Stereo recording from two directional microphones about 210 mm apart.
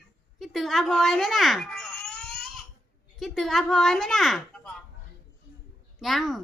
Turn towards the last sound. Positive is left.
turn(degrees=0)  # may be behind; listen again after turning